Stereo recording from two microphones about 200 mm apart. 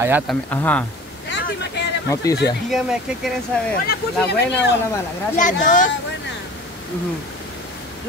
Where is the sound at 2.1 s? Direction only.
15° left (ahead or behind).